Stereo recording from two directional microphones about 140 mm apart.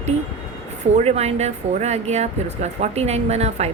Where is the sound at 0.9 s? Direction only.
50° right (ahead or behind).